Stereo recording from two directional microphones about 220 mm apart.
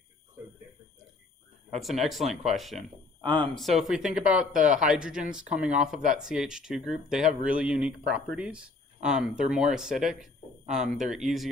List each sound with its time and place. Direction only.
1.7 s a man's voice: centre (ahead or behind)
3.2 s speech: 20° right (ahead or behind)
3.5 s a man's voice: centre (ahead or behind)